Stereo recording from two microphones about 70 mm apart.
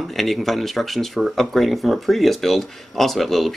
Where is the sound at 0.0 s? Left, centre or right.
Centre.